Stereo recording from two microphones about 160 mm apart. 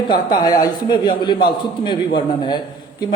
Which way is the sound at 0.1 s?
25° left (ahead or behind).